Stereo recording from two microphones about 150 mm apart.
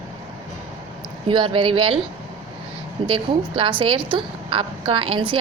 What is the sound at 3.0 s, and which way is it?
Speech, 35° right (ahead or behind).